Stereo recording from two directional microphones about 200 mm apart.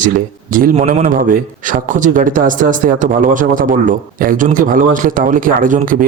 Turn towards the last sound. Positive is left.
turn(degrees=-40)  # may be behind; listen again after turning